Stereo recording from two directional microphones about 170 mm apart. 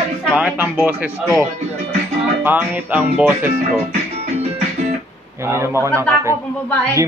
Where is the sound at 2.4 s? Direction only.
10° right (ahead or behind).